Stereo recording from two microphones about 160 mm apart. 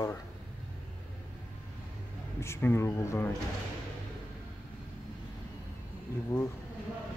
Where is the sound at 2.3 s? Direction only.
15° left (ahead or behind).